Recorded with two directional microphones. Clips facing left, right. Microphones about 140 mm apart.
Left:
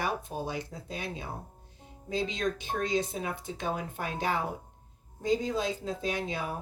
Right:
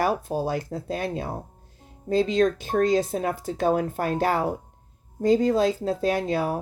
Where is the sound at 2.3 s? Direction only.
45° right (ahead or behind).